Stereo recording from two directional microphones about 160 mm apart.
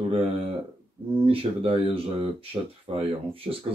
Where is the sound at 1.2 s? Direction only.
35° right (ahead or behind).